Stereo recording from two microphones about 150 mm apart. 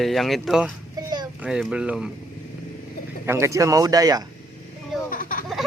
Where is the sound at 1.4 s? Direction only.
5° right (ahead or behind).